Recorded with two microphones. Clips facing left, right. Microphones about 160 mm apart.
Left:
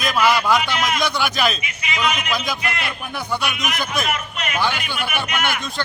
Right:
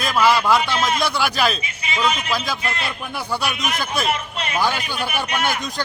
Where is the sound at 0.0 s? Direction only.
30° right (ahead or behind).